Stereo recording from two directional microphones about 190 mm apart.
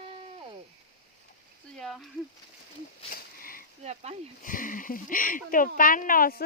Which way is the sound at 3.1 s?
50° left (ahead or behind).